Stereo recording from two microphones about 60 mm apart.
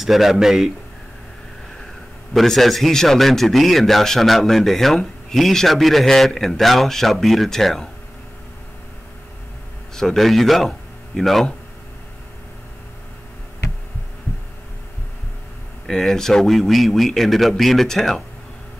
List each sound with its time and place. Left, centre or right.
0.0 s a man's voice: centre
2.3 s a man's voice: centre
9.9 s speech: centre
15.9 s a man's voice: centre